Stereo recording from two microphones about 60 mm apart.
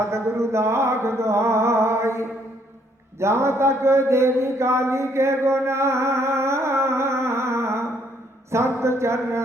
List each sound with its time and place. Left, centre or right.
0.0 s music: right
3.2 s a sound: right
8.5 s speech: right